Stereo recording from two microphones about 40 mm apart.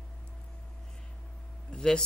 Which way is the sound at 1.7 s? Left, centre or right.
Centre.